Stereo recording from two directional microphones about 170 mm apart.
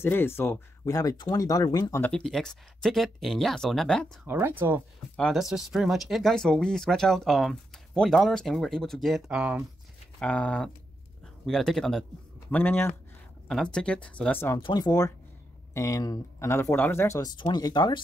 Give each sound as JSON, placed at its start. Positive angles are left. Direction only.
{"t": 0.0, "sound": "speech", "side_deg": 15}
{"t": 4.3, "sound": "speech", "side_deg": -15}
{"t": 5.1, "sound": "speech", "side_deg": 0}
{"t": 10.1, "sound": "speech", "side_deg": 5}
{"t": 14.6, "sound": "speech", "side_deg": 25}